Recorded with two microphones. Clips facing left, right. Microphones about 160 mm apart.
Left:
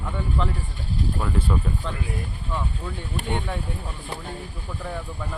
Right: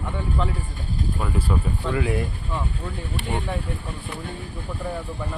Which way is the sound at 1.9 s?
90° right.